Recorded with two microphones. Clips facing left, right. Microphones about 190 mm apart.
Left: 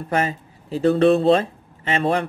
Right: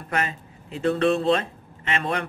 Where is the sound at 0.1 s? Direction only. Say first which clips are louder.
Left 5 dB; 30° left (ahead or behind).